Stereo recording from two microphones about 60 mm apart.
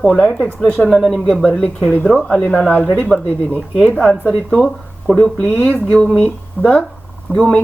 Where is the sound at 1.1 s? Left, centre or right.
Centre.